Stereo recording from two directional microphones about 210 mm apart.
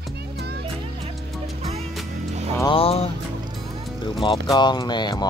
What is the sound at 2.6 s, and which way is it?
Music, 25° left (ahead or behind).